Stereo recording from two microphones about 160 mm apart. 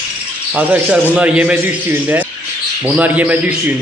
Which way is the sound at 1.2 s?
5° right (ahead or behind).